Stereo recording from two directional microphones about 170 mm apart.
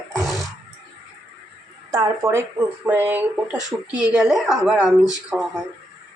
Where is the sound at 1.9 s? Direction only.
20° right (ahead or behind).